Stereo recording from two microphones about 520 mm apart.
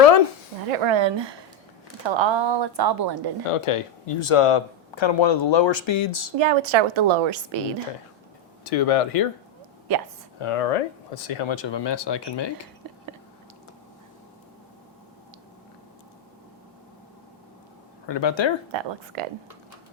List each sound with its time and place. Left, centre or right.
0.0 s a sound: left
0.7 s a woman's voice: right
3.5 s speech: left
6.3 s a woman's voice: right
8.6 s speech: left
9.9 s speech: right
10.3 s speech: left
18.0 s speech: left
18.7 s a woman's voice: right